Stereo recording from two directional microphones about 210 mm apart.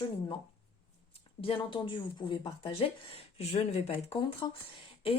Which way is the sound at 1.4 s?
25° left (ahead or behind).